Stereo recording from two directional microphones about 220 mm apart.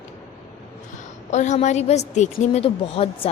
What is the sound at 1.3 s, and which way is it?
A woman's voice, 30° left (ahead or behind).